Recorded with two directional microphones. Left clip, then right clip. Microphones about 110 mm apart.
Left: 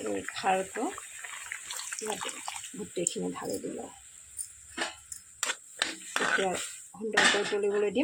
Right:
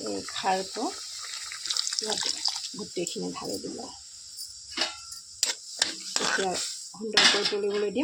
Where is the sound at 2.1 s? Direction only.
25° right (ahead or behind).